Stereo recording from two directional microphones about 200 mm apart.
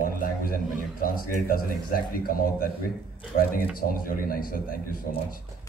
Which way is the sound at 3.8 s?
45° left (ahead or behind).